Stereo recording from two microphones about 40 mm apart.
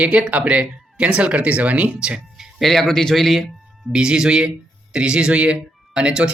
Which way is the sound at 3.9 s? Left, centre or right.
Centre.